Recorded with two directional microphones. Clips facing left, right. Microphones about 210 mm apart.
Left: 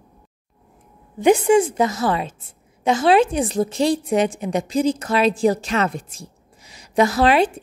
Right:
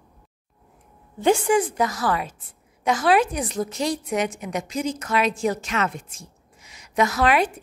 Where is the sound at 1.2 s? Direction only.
20° left (ahead or behind).